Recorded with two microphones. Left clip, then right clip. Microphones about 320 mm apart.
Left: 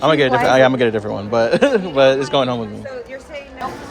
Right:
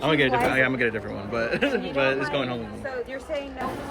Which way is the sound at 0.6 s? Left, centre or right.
Centre.